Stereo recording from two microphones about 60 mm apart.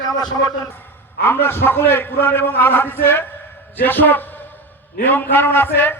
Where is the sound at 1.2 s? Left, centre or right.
Left.